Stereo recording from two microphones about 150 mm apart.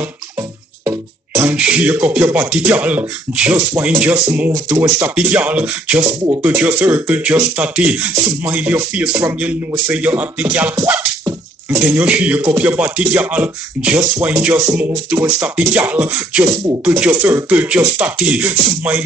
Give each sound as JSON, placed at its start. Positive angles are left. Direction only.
{"t": 0.8, "sound": "music", "side_deg": -15}
{"t": 1.6, "sound": "speech", "side_deg": -10}
{"t": 12.0, "sound": "speech", "side_deg": -10}